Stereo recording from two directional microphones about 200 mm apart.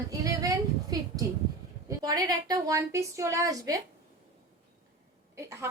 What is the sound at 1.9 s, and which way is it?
A woman's voice, 20° right (ahead or behind).